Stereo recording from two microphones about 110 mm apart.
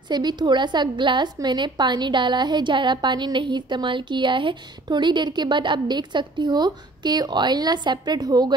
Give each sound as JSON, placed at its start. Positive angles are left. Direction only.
{"t": 0.1, "sound": "a woman's voice", "side_deg": -40}